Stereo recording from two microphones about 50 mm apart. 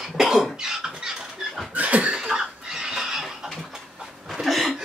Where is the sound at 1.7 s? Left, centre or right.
Right; by 4.8 s centre.